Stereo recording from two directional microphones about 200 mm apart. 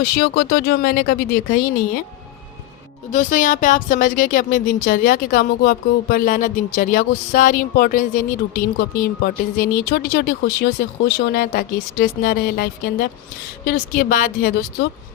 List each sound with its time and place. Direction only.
0.0 s speech: 55° left (ahead or behind)
3.1 s speech: 40° left (ahead or behind)